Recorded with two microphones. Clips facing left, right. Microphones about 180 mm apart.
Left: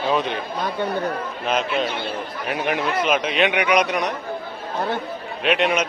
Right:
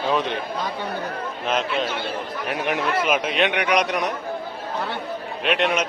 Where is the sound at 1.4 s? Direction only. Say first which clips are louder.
Left 1 dB; centre (ahead or behind).